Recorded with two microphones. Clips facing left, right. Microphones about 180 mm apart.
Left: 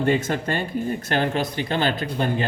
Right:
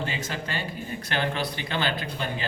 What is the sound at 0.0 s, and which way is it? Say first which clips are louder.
A man's voice: left 10 dB; 55° left (ahead or behind).